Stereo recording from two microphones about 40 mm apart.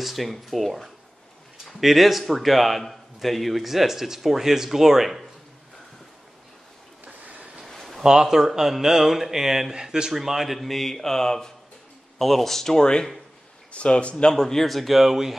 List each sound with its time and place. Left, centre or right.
0.0 s a man's voice: centre
7.1 s vehicle: right
7.6 s a sound: centre
8.0 s speech: centre
13.7 s speech: left
14.3 s a man's voice: centre